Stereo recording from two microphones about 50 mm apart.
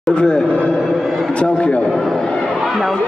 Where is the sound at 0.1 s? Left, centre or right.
Centre.